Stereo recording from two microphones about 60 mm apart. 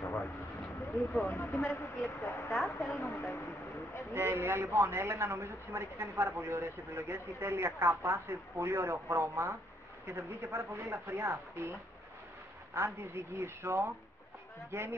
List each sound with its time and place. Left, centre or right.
0.0 s vehicle: left
1.2 s speech: left
2.5 s a woman's voice: centre
2.9 s speech: left
4.1 s a woman's voice: right
12.7 s a woman's voice: right